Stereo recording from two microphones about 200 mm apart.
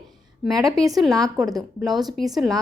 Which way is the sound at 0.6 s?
15° right (ahead or behind).